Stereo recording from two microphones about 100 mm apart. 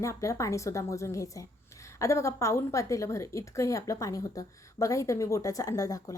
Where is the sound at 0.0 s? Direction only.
30° left (ahead or behind).